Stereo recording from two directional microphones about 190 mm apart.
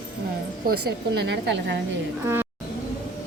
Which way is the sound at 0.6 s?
60° right (ahead or behind).